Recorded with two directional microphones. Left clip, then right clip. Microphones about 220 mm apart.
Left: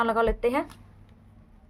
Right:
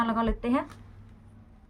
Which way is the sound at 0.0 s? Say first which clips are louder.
Left 5 dB; 60° left (ahead or behind).